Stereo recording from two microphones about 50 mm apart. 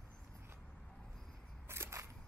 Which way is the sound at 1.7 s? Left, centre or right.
Right.